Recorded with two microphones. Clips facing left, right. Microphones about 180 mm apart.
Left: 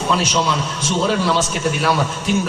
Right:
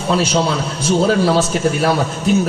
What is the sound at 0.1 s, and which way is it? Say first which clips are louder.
A man's voice: right 4 dB; 30° right (ahead or behind).